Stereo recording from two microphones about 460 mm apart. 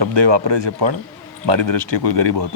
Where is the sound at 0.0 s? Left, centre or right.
Right.